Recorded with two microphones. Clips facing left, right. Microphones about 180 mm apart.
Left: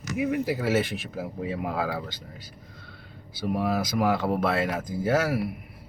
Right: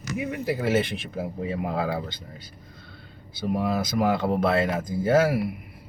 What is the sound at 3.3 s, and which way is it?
Speech, 5° left (ahead or behind).